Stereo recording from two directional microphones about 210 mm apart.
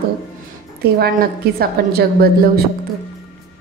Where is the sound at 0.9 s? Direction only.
45° right (ahead or behind).